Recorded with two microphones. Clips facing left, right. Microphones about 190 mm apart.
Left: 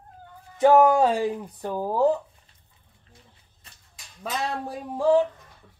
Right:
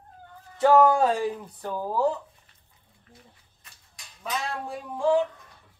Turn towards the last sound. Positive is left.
turn(degrees=40)  # may be behind; listen again after turning